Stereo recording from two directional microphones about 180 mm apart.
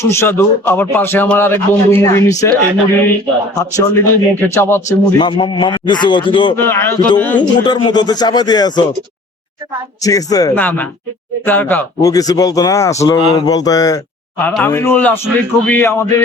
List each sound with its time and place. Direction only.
0.0 s a man's voice: 15° left (ahead or behind)
3.6 s a man's voice: 15° left (ahead or behind)
6.6 s a man's voice: 15° left (ahead or behind)
7.6 s a man's voice: 25° left (ahead or behind)
10.0 s a man's voice: 20° left (ahead or behind)